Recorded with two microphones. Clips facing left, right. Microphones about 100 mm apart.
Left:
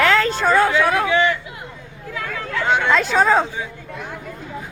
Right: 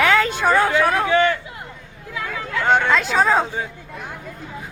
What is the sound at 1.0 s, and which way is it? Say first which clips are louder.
Speech: right 1 dB; 40° right (ahead or behind).